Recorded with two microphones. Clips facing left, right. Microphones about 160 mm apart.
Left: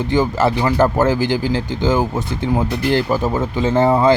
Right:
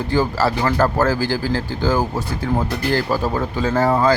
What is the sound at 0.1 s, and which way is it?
Speech, 20° left (ahead or behind).